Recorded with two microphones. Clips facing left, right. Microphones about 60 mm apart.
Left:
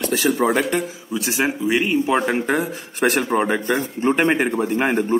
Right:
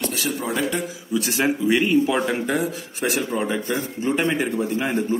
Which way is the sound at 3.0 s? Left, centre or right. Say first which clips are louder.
Left 5 dB; left.